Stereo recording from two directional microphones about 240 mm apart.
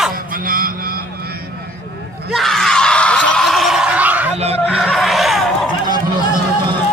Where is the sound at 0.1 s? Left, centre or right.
Right.